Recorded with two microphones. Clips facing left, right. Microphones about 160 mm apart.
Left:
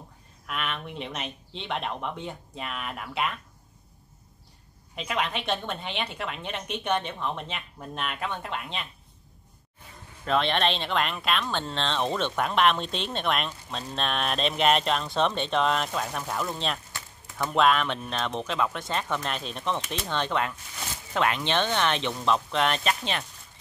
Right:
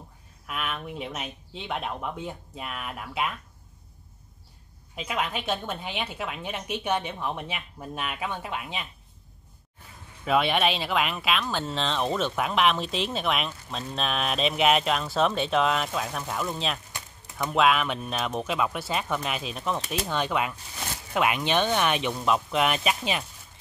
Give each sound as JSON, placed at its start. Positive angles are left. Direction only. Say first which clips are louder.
{"t": 0.5, "sound": "speech", "louder": "even", "side_deg": -5}
{"t": 4.9, "sound": "speech", "louder": "even", "side_deg": -5}
{"t": 10.2, "sound": "speech", "louder": "right 1 dB", "side_deg": -10}
{"t": 16.9, "sound": "a sound", "louder": "even", "side_deg": -15}
{"t": 17.6, "sound": "speech", "louder": "even", "side_deg": -5}